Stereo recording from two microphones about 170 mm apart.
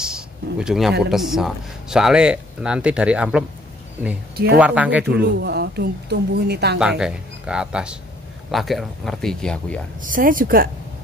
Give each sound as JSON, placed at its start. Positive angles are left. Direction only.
{"t": 0.0, "sound": "a sound", "side_deg": -5}
{"t": 1.1, "sound": "speech", "side_deg": 0}
{"t": 4.6, "sound": "speech", "side_deg": -10}
{"t": 5.4, "sound": "a woman's voice", "side_deg": -70}
{"t": 6.8, "sound": "speech", "side_deg": -5}
{"t": 10.0, "sound": "a woman's voice", "side_deg": -55}